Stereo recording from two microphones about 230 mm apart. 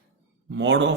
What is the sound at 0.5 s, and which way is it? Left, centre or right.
Speech, right.